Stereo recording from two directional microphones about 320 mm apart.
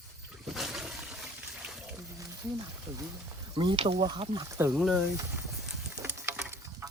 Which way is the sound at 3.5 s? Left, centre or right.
Centre.